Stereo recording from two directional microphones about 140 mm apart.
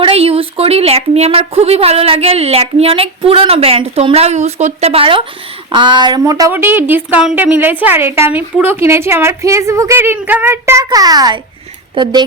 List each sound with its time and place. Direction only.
0.0 s a woman's voice: 40° right (ahead or behind); by 6.5 s 25° right (ahead or behind)
6.5 s a woman's voice: 15° right (ahead or behind); by 12.1 s 35° right (ahead or behind)